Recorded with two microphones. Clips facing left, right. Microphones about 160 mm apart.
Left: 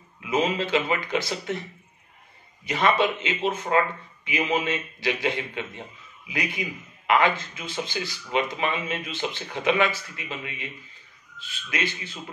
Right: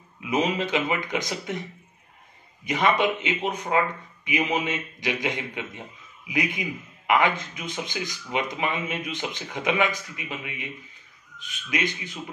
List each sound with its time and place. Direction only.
0.2 s speech: 15° right (ahead or behind)
2.6 s speech: 15° right (ahead or behind)